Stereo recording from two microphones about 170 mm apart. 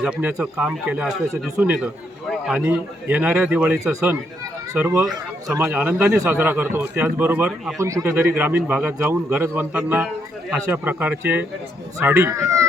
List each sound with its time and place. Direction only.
0.0 s a man's voice: 10° right (ahead or behind)